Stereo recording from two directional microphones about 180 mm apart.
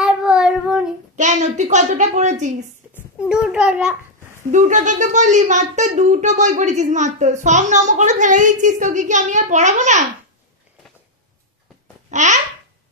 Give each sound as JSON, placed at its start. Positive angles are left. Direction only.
{"t": 0.0, "sound": "child singing", "side_deg": -5}
{"t": 1.1, "sound": "a child's voice", "side_deg": -40}
{"t": 3.3, "sound": "a child's voice", "side_deg": -5}
{"t": 4.5, "sound": "a child's voice", "side_deg": -45}
{"t": 12.1, "sound": "babbling", "side_deg": -40}